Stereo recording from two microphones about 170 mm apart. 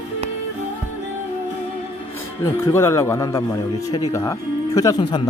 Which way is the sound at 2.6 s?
15° left (ahead or behind).